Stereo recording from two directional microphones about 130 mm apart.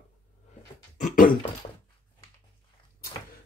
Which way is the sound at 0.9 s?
85° left.